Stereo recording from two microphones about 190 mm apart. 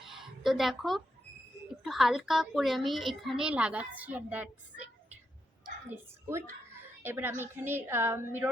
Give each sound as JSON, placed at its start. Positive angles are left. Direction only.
{"t": 0.0, "sound": "a sound", "side_deg": 0}
{"t": 1.6, "sound": "a child's voice", "side_deg": 0}
{"t": 7.0, "sound": "a woman's voice", "side_deg": -10}